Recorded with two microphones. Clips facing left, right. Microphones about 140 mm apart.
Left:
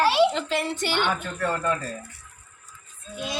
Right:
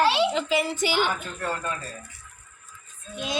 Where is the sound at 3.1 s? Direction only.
20° right (ahead or behind).